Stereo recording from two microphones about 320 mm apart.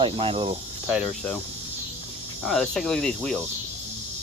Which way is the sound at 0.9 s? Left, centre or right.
Centre.